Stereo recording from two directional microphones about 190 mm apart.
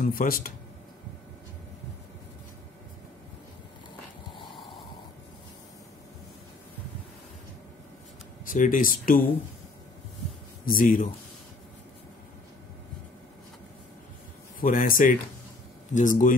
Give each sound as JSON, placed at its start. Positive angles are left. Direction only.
{"t": 0.0, "sound": "speech", "side_deg": 50}
{"t": 8.5, "sound": "speech", "side_deg": 45}
{"t": 10.6, "sound": "speech", "side_deg": 50}
{"t": 14.6, "sound": "speech", "side_deg": 45}